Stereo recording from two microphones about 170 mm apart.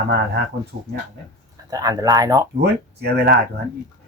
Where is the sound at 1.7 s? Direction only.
20° right (ahead or behind).